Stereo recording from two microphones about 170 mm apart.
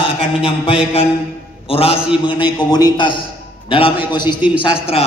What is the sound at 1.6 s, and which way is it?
A man's voice, 35° left (ahead or behind).